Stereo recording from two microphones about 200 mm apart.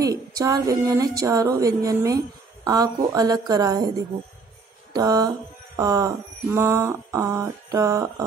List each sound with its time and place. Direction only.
0.0 s speech: 15° right (ahead or behind)
4.9 s mantra: 20° right (ahead or behind)
5.8 s speech: 15° right (ahead or behind)